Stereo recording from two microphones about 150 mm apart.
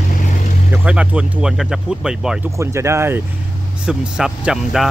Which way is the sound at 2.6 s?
20° right (ahead or behind).